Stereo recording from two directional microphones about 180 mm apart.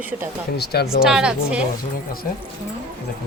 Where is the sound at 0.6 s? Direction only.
65° left (ahead or behind).